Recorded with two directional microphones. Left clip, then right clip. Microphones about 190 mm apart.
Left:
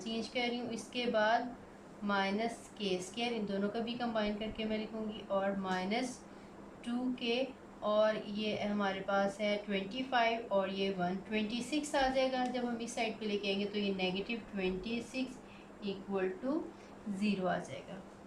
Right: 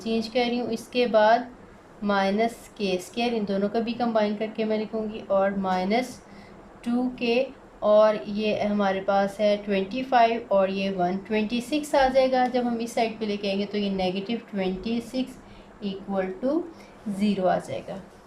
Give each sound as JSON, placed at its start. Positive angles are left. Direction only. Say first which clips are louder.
{"t": 0.0, "sound": "speech", "louder": "right 11 dB", "side_deg": -45}
{"t": 16.4, "sound": "speech", "louder": "right 11 dB", "side_deg": -45}